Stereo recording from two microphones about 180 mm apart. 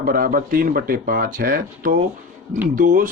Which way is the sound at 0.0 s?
50° right (ahead or behind).